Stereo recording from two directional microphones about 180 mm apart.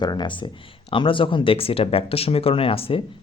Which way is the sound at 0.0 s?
25° left (ahead or behind).